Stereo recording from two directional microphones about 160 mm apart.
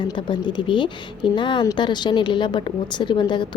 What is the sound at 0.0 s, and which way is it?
A woman's voice, 30° left (ahead or behind).